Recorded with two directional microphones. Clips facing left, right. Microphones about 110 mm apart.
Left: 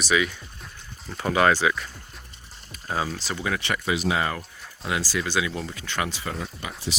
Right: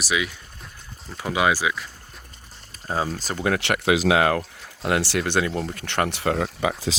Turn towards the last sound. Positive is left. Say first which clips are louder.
# right 10 dB
turn(degrees=-85)